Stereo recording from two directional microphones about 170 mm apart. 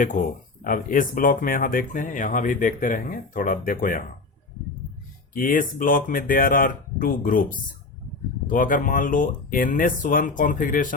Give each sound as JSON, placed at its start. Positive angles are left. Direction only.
{"t": 0.6, "sound": "speech", "side_deg": 55}
{"t": 5.3, "sound": "speech", "side_deg": 55}